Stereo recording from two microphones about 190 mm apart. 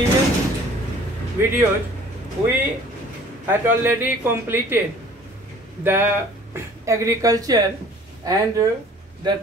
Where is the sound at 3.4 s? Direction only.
10° right (ahead or behind).